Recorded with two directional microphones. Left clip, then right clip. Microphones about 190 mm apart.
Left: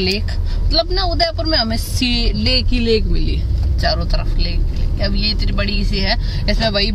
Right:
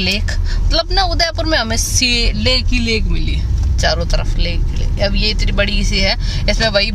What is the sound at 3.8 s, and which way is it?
A woman's voice, 30° right (ahead or behind).